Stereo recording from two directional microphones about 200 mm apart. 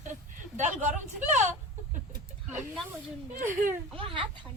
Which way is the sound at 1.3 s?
35° right (ahead or behind).